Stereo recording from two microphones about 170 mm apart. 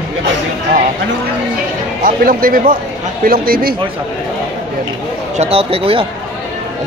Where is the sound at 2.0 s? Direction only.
55° right (ahead or behind).